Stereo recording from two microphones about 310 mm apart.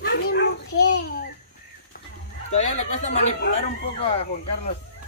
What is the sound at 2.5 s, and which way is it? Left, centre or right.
Chicken, left.